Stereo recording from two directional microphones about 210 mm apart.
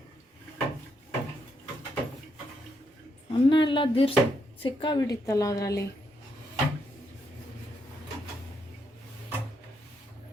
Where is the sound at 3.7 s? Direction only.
25° left (ahead or behind).